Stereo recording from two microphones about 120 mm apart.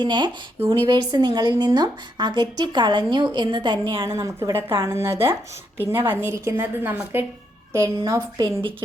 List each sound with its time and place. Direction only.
0.0 s a woman's voice: 40° right (ahead or behind)
4.0 s a woman's voice: 20° right (ahead or behind)